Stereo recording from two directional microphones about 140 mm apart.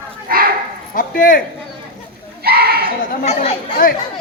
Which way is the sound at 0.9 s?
85° left.